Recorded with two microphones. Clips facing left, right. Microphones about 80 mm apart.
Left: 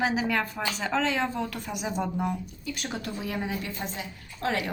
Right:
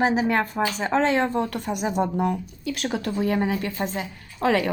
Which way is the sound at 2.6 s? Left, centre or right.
Right.